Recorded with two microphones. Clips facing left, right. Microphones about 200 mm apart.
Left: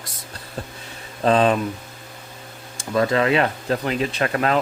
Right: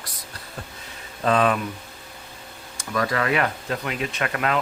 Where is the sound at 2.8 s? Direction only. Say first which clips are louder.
Left 5 dB; 25° left (ahead or behind).